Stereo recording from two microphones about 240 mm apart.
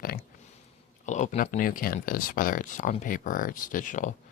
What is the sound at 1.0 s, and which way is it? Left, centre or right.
Speech, left.